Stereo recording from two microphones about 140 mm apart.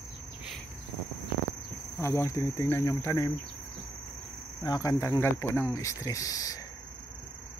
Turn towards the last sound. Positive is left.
turn(degrees=25)  # may be behind; listen again after turning